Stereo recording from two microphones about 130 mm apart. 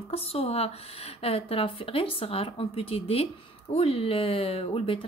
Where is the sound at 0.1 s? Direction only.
50° left (ahead or behind).